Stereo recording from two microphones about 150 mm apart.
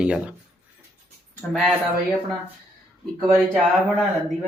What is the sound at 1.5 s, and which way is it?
Speech, centre (ahead or behind).